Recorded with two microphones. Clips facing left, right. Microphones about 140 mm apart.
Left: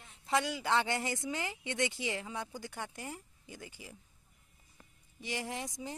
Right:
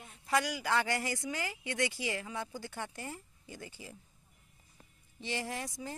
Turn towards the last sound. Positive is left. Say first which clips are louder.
# even
turn(degrees=20)  # may be behind; listen again after turning